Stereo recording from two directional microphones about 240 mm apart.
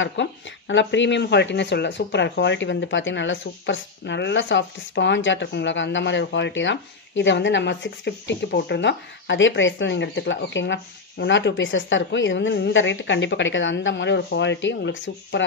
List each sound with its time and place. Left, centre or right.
0.0 s speech: left